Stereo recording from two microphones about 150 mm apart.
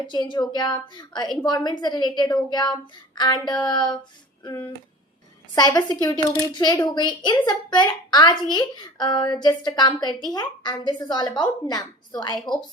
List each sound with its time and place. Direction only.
0.1 s a woman's voice: 30° left (ahead or behind)
5.5 s a woman's voice: 25° left (ahead or behind)